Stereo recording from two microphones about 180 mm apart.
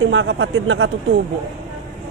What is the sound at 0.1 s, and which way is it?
Speech, 90° right.